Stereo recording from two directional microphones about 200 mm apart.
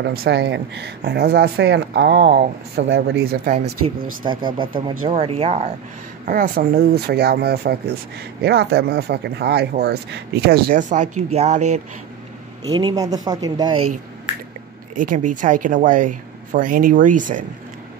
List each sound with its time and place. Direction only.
0.0 s speech: 55° right (ahead or behind)
3.3 s speech: 45° right (ahead or behind)
4.2 s a woman's voice: 25° right (ahead or behind)
6.2 s speech: 45° right (ahead or behind)
12.7 s speech: 20° right (ahead or behind)
15.0 s a woman's voice: 40° right (ahead or behind)